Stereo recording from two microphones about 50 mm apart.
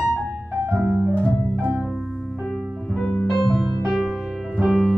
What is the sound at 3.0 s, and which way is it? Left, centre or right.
Music, centre.